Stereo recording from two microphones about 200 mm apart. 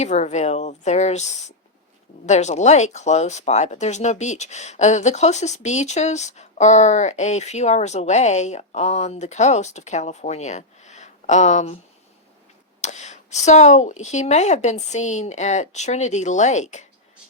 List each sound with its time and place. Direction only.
0.0 s speech: 35° left (ahead or behind)
12.8 s speech: 35° left (ahead or behind)